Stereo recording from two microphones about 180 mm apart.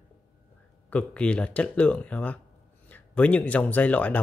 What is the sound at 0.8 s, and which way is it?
Speech, 5° left (ahead or behind).